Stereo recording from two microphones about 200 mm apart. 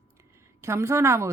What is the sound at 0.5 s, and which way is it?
Speech, 15° right (ahead or behind).